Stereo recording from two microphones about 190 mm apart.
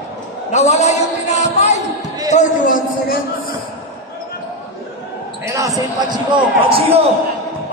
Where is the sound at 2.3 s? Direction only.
40° left (ahead or behind).